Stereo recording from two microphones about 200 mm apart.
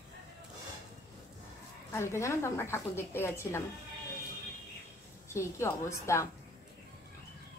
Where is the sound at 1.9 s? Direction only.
15° left (ahead or behind).